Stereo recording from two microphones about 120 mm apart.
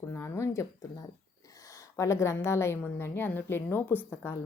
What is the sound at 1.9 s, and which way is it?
A woman's voice, 25° left (ahead or behind).